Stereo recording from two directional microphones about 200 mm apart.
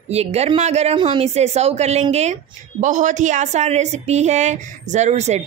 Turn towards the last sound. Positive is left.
turn(degrees=-35)  # may be behind; listen again after turning